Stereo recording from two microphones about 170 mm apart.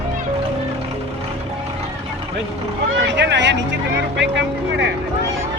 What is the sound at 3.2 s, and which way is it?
Speech, 90° right.